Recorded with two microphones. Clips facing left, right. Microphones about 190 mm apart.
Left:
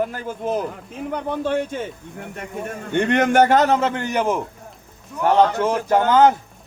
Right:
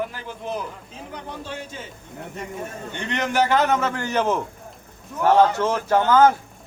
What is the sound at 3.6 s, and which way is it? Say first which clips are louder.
A man's voice: left 3 dB; 30° left (ahead or behind).